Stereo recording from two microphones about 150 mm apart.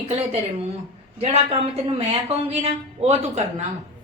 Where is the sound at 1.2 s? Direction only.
45° right (ahead or behind).